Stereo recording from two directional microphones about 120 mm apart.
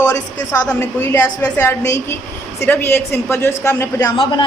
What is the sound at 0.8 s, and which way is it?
A woman's voice, 25° left (ahead or behind).